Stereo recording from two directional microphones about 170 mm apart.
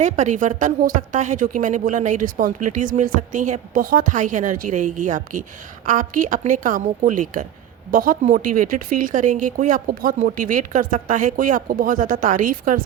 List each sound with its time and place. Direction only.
0.0 s a woman's voice: 45° right (ahead or behind)